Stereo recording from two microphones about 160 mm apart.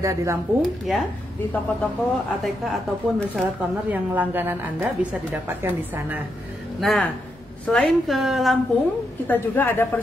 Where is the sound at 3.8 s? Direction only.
10° right (ahead or behind).